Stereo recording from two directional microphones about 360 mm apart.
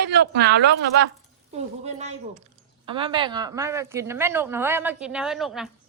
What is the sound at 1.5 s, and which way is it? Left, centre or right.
Speech, centre.